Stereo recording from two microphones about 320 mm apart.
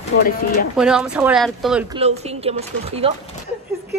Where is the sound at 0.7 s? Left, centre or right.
Centre.